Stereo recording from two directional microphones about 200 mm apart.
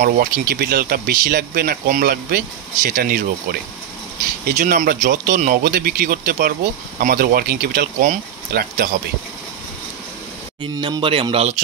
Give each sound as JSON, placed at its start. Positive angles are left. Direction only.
{"t": 0.0, "sound": "speech", "side_deg": -50}
{"t": 4.5, "sound": "speech", "side_deg": -40}
{"t": 10.6, "sound": "speech", "side_deg": -25}